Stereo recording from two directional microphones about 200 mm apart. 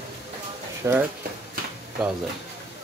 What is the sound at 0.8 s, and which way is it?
Speech, 10° right (ahead or behind).